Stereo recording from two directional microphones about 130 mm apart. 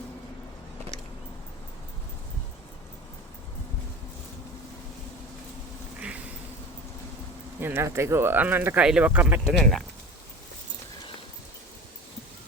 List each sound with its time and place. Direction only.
6.0 s a sound: 10° right (ahead or behind)
7.6 s speech: 20° right (ahead or behind)
9.5 s speech: centre (ahead or behind)